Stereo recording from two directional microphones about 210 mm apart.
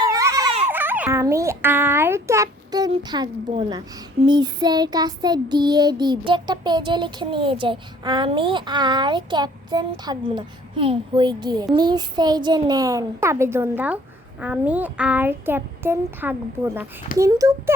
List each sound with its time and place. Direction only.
0.1 s baby cry: 15° right (ahead or behind)
0.7 s a child's voice: 10° right (ahead or behind)
4.3 s child singing: 20° right (ahead or behind)
14.4 s a child's voice: 5° right (ahead or behind)